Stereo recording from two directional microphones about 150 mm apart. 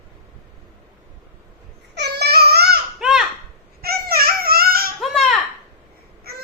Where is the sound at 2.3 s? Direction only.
90° right.